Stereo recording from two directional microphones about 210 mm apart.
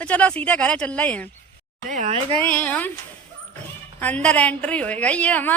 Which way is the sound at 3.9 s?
5° left (ahead or behind).